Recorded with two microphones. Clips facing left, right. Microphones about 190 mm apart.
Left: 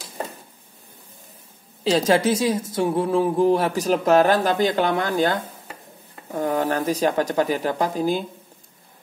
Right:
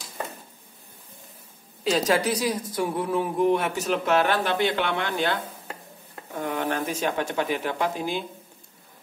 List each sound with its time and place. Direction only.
1.9 s speech: 30° left (ahead or behind)